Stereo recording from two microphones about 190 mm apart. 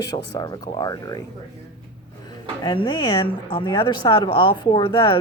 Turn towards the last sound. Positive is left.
turn(degrees=25)  # may be behind; listen again after turning